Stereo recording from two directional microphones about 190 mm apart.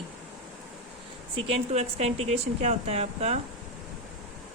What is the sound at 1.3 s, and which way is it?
Speech, 35° right (ahead or behind).